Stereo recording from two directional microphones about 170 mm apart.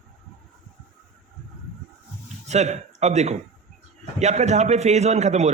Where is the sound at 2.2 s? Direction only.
40° right (ahead or behind).